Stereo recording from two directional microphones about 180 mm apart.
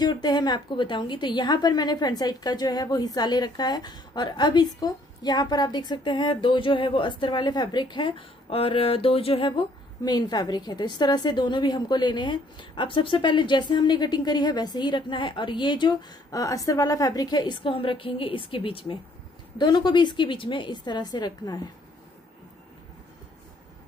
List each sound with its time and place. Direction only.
0.0 s a woman's voice: 25° left (ahead or behind)